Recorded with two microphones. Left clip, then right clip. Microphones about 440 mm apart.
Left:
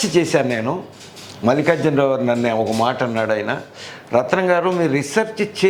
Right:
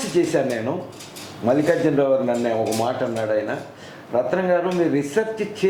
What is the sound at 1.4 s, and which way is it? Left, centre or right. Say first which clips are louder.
A man's voice: left 2 dB; left.